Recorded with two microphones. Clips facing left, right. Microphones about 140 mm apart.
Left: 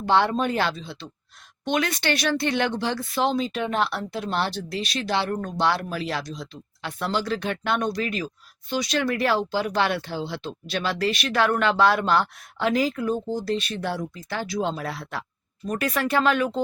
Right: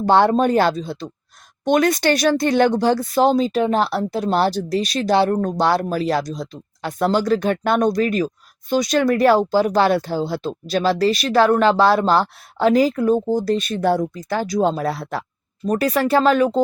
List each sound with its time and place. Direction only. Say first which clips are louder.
0.0 s speech: right 7 dB; 40° right (ahead or behind)